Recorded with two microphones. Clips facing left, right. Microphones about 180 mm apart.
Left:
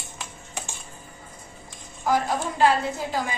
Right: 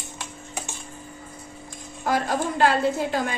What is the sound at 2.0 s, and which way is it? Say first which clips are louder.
A woman's voice: even; 70° right (ahead or behind).